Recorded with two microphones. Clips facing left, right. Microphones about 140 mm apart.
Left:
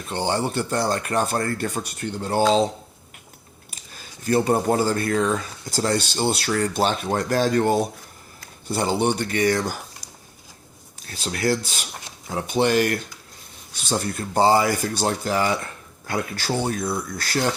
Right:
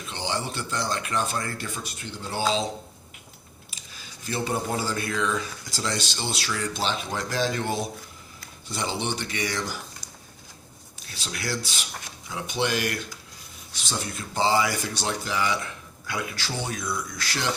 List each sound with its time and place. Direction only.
0.0 s speech: 50° left (ahead or behind)
3.9 s speech: 50° left (ahead or behind)
11.0 s speech: 45° left (ahead or behind)
17.2 s speech: 45° left (ahead or behind)